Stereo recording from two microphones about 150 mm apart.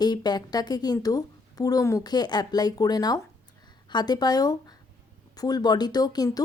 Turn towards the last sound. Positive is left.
turn(degrees=25)  # may be behind; listen again after turning